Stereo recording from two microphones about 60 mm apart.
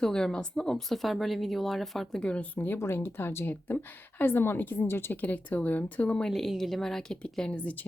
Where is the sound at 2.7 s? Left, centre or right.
Left; by 6.3 s centre.